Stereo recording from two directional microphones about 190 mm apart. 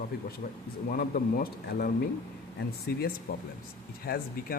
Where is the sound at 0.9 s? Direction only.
50° left (ahead or behind).